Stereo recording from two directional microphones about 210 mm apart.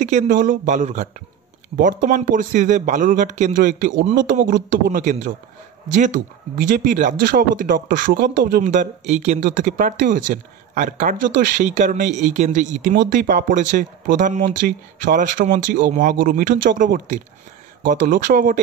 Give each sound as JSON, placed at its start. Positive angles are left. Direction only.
{"t": 0.0, "sound": "speech", "side_deg": -35}
{"t": 6.7, "sound": "speech", "side_deg": -40}